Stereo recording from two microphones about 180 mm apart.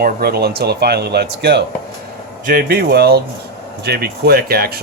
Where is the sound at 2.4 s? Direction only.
55° right (ahead or behind).